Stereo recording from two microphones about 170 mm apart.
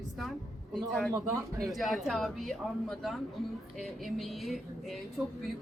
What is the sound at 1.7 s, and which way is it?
A woman's voice, centre (ahead or behind).